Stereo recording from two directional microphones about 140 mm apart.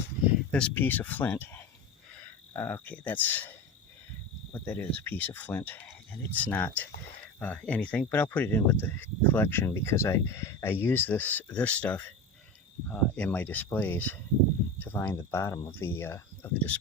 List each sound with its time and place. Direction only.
0.5 s speech: 10° left (ahead or behind)
4.6 s speech: 10° left (ahead or behind)